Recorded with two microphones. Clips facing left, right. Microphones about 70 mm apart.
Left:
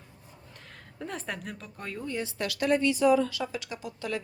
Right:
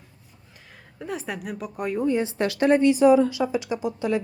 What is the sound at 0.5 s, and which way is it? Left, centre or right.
Speech, centre.